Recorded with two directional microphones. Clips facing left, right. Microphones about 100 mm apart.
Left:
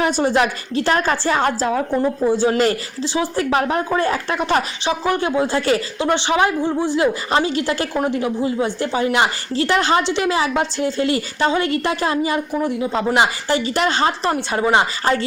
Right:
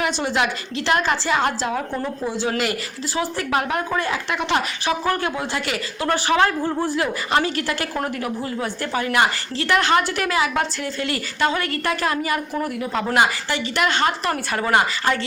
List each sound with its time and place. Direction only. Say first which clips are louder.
0.0 s a woman's voice: left 5 dB; 35° left (ahead or behind)
2.6 s a woman's voice: left 6 dB; 30° left (ahead or behind)
4.0 s a woman's voice: left 4 dB; 40° left (ahead or behind)
4.9 s a woman's voice: left 2 dB; 25° left (ahead or behind)
6.1 s a woman's voice: left 1 dB; 20° left (ahead or behind)
14.3 s a woman's voice: left 4 dB; 20° left (ahead or behind)